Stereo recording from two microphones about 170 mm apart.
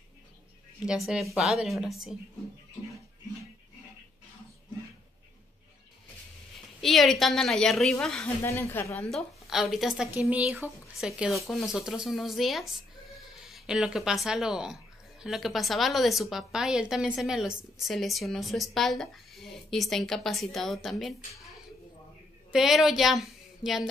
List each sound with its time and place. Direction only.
0.8 s a woman's voice: centre (ahead or behind)
6.8 s a woman's voice: centre (ahead or behind)
8.4 s speech: 15° left (ahead or behind)
9.1 s a woman's voice: centre (ahead or behind)